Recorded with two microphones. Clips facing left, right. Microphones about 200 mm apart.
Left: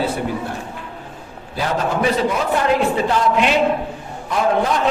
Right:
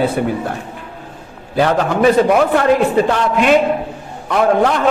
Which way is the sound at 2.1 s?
60° right (ahead or behind).